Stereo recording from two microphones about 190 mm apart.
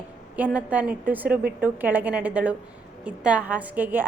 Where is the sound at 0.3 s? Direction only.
10° right (ahead or behind).